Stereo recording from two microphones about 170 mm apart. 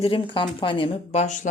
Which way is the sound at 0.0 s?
30° left (ahead or behind).